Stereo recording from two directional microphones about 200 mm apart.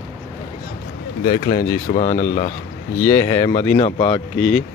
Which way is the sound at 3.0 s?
15° left (ahead or behind).